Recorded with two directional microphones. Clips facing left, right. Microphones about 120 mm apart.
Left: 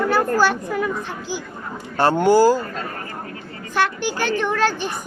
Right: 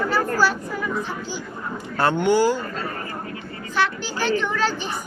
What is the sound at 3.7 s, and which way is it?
A child's voice, 50° left (ahead or behind).